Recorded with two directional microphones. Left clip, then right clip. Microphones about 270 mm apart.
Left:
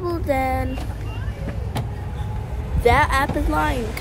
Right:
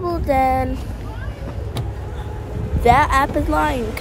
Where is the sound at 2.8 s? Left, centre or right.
Centre.